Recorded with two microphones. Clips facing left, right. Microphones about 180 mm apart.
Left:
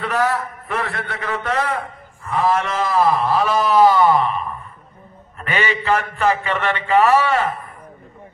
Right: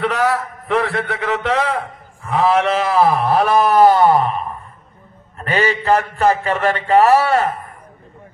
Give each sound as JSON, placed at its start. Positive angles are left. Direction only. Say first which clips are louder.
{"t": 0.0, "sound": "a man's voice", "louder": "right 2 dB", "side_deg": -80}